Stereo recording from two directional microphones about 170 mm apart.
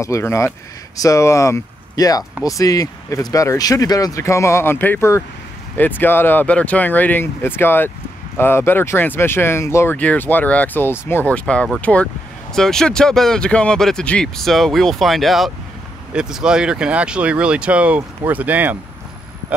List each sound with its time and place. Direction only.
0.0 s speech: 15° left (ahead or behind); by 18.8 s 10° right (ahead or behind)